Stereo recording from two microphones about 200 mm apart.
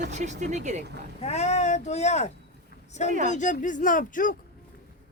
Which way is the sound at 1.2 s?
35° left (ahead or behind).